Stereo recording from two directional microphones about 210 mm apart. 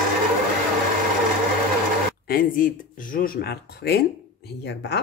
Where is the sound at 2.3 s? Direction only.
40° left (ahead or behind).